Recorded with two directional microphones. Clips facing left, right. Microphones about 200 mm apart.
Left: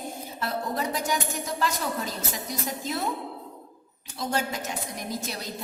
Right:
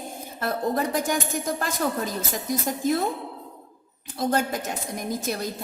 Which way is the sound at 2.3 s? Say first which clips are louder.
Right 5 dB; 50° right (ahead or behind).